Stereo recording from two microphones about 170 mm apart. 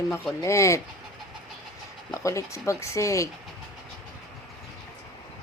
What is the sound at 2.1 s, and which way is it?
Speech, 20° left (ahead or behind).